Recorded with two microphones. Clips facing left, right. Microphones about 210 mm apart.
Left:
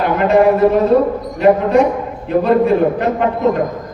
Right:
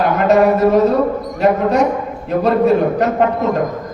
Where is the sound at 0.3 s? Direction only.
40° right (ahead or behind).